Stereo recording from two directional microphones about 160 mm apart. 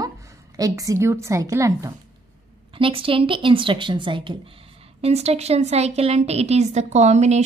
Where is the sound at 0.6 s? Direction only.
20° right (ahead or behind).